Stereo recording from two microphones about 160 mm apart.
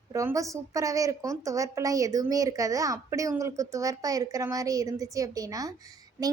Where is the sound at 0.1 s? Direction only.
20° right (ahead or behind).